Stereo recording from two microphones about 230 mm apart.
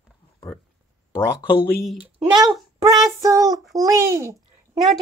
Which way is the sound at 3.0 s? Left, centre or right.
Centre.